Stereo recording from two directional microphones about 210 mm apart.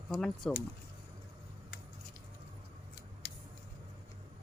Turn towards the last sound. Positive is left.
turn(degrees=50)  # may be behind; listen again after turning